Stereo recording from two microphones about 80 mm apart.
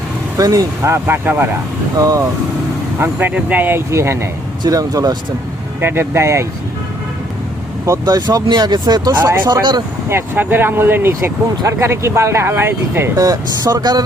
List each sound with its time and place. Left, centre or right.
0.3 s speech: right
0.9 s speech: right
2.0 s speech: right
3.0 s speech: right
4.6 s speech: right
5.8 s speech: right
8.0 s speech: right
9.1 s speech: right
9.5 s speech: right
10.1 s speech: right
13.1 s speech: right